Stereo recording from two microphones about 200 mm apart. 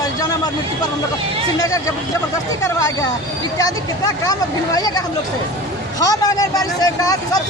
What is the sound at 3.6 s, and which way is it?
Speech, 20° left (ahead or behind).